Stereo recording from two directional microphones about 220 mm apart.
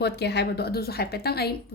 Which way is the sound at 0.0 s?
50° left (ahead or behind).